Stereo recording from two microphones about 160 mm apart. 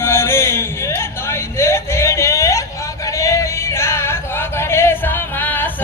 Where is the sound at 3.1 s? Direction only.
20° left (ahead or behind).